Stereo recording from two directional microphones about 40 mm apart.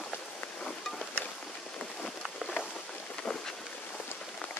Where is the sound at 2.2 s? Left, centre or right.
Centre.